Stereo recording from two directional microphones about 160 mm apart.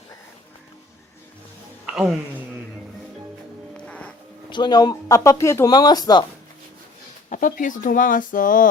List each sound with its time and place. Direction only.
3.8 s music: 5° left (ahead or behind)
4.4 s speech: 30° left (ahead or behind)
7.3 s speech: 55° left (ahead or behind)